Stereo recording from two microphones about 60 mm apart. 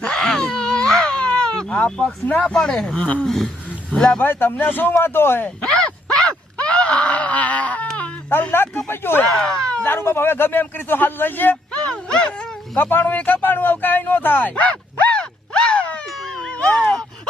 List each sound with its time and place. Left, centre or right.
0.0 s baby cry: centre
1.7 s speech: centre
3.2 s speech: centre
4.2 s a man's voice: left
5.6 s groan: centre
8.5 s a man's voice: left
9.4 s speech: centre
9.8 s a man's voice: left
11.8 s a sound: centre
12.7 s speech: left; by 16.0 s centre
16.0 s a sound: centre